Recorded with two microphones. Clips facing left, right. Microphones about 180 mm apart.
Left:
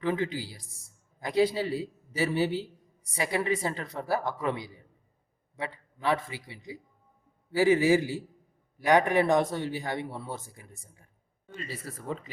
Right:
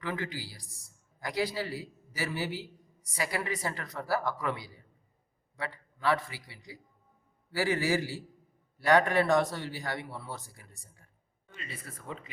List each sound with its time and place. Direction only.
0.0 s a man's voice: 25° left (ahead or behind)
11.4 s speech: 35° left (ahead or behind)